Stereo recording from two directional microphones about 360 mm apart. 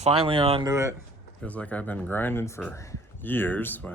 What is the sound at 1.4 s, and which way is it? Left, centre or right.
Speech, centre.